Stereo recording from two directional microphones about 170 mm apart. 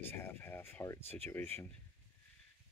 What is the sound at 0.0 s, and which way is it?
Speech, 15° left (ahead or behind).